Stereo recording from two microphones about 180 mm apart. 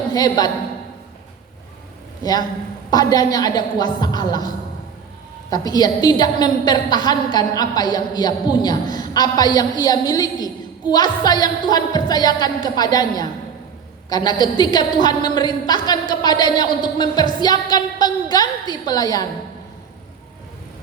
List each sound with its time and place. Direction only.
0.1 s a woman's voice: 20° left (ahead or behind)
2.9 s a woman's voice: 20° left (ahead or behind)